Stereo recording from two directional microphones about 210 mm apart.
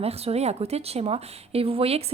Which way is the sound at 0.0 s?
30° right (ahead or behind).